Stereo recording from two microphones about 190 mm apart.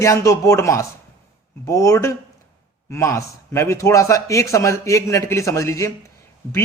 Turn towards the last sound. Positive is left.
turn(degrees=15)  # may be behind; listen again after turning